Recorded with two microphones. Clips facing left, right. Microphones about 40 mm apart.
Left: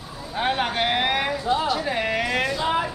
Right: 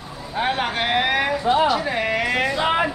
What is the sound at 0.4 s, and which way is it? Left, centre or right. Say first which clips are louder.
Speech: right 1 dB; centre.